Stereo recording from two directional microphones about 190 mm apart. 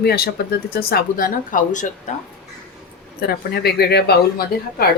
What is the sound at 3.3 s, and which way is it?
Speech, 55° left (ahead or behind).